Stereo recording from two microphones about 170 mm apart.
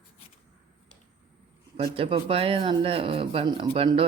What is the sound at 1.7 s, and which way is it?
Speech, 30° right (ahead or behind).